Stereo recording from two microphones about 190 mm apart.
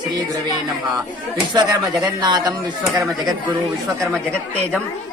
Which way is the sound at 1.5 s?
20° right (ahead or behind).